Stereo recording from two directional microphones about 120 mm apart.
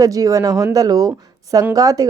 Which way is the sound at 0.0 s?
30° right (ahead or behind).